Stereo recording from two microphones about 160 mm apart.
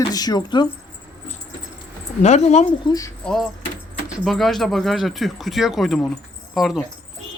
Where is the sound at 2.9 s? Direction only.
20° left (ahead or behind).